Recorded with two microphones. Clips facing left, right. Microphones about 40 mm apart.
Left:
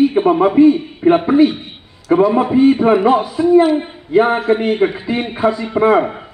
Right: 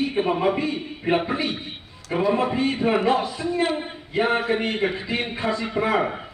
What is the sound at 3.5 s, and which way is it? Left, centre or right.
Speech, left.